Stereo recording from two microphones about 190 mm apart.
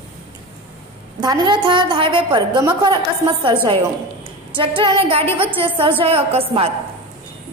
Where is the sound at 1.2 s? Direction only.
20° right (ahead or behind).